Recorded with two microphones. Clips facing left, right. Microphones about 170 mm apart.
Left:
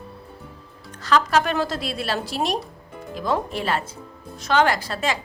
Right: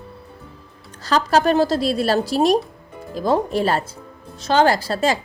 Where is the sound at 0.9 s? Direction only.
35° right (ahead or behind).